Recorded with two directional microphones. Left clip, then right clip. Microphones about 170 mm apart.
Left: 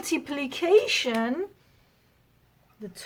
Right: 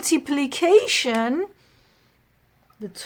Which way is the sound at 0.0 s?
35° right (ahead or behind).